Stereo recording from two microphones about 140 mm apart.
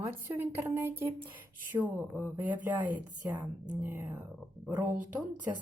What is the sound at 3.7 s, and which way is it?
Speech, 15° right (ahead or behind).